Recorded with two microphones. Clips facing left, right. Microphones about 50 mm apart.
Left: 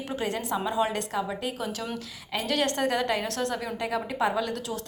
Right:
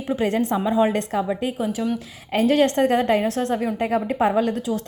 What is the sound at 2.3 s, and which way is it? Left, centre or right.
A woman's voice, right.